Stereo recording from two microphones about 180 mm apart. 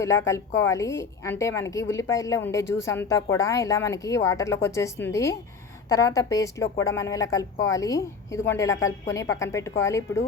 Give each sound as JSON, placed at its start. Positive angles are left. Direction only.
{"t": 0.0, "sound": "a woman's voice", "side_deg": 15}